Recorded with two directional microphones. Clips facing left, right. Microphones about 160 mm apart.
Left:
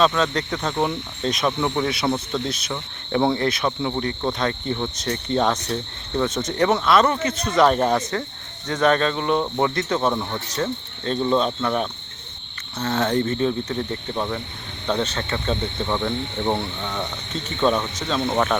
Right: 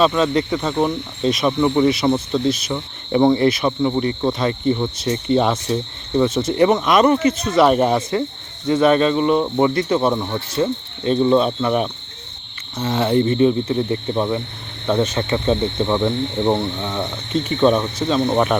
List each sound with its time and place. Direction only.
0.0 s cricket: 5° right (ahead or behind)
16.5 s cricket: 5° right (ahead or behind)